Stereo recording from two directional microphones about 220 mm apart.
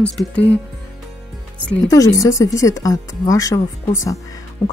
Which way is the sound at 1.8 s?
15° left (ahead or behind).